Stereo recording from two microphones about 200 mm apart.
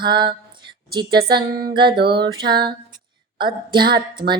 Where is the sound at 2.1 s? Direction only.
25° right (ahead or behind).